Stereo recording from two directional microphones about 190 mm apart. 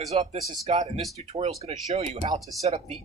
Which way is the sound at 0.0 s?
35° right (ahead or behind).